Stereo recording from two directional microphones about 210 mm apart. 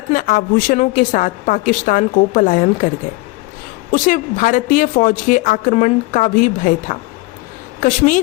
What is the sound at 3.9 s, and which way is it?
A woman's voice, 40° left (ahead or behind).